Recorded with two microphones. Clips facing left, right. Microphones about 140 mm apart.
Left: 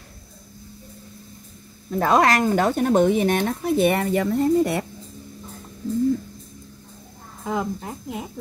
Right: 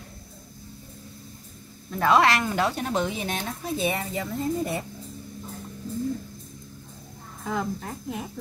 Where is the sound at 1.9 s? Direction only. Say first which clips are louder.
Left 2 dB; 40° left (ahead or behind); by 4.8 s 80° left.